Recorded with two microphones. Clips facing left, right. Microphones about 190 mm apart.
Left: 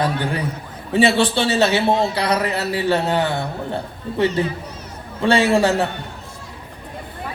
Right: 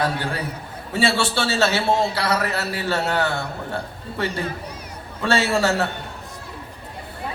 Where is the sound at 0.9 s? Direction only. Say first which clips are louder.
Left 5 dB; 20° left (ahead or behind).